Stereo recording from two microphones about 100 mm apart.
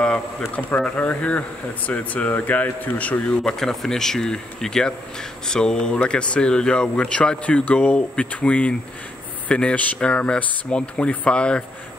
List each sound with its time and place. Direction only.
0.4 s a man's voice: 25° left (ahead or behind)
0.7 s speech: 10° left (ahead or behind)